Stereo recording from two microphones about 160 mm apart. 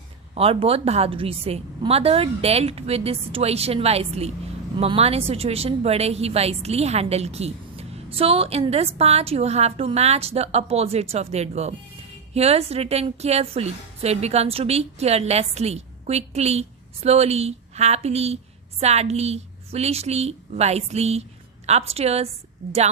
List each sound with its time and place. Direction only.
0.3 s a woman's voice: 40° right (ahead or behind)